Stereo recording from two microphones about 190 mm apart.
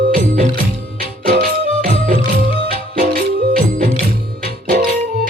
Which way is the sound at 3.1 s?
50° right (ahead or behind).